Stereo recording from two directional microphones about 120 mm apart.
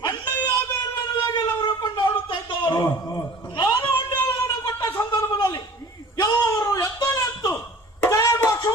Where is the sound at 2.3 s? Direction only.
40° left (ahead or behind).